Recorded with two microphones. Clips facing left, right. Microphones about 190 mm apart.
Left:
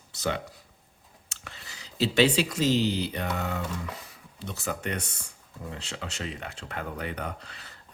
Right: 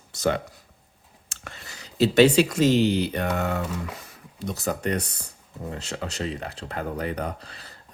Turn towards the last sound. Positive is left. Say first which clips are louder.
# right 4 dB
turn(degrees=-35)  # may be behind; listen again after turning